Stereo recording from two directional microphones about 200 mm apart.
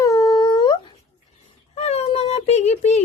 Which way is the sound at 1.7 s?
30° left (ahead or behind).